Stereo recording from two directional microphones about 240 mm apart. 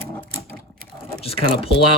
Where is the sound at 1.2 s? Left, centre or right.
Left.